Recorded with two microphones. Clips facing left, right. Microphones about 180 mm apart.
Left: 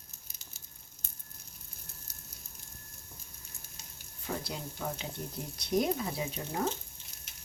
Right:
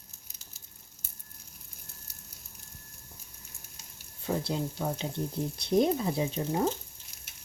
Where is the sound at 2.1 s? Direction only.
10° right (ahead or behind).